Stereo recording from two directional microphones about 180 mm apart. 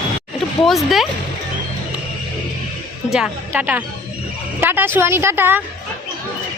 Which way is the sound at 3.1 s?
5° right (ahead or behind).